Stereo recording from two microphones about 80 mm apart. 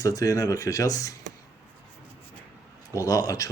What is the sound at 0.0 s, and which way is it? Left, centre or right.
Speech, left.